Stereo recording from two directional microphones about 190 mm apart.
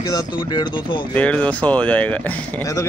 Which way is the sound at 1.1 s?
5° left (ahead or behind).